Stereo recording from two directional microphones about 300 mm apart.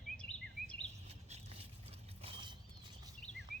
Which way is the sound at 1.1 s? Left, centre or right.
Centre.